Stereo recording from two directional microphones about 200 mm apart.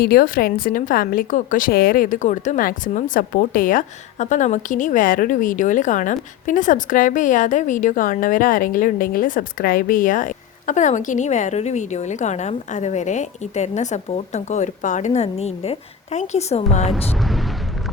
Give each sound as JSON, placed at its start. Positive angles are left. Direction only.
{"t": 0.0, "sound": "a woman's voice", "side_deg": 45}
{"t": 16.9, "sound": "speech", "side_deg": 0}